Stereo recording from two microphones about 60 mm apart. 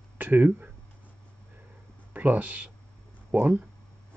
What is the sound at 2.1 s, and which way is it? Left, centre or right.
Speech, right.